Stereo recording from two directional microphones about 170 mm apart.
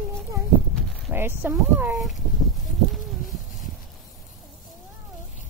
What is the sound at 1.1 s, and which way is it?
Speech, 15° right (ahead or behind).